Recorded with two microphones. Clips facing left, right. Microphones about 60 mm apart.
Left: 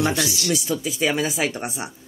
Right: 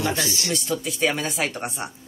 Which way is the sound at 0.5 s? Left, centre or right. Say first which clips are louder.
Left 2 dB; centre.